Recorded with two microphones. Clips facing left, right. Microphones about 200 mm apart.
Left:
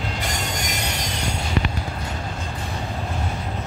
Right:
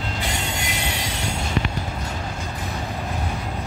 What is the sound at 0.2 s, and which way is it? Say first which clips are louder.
Train: even; 40° left (ahead or behind).